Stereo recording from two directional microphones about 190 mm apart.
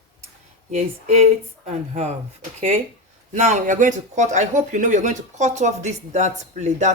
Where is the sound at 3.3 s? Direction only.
40° right (ahead or behind).